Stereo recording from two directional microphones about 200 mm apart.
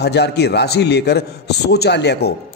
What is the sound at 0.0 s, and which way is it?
A man's voice, 55° left (ahead or behind).